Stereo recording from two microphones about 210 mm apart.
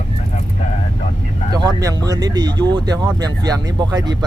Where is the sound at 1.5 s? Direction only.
15° right (ahead or behind).